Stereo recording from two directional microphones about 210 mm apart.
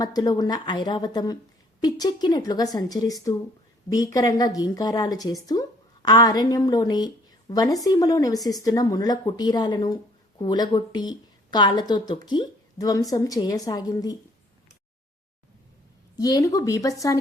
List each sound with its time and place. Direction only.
0.0 s a woman's voice: 15° left (ahead or behind)
16.1 s a woman's voice: 15° left (ahead or behind)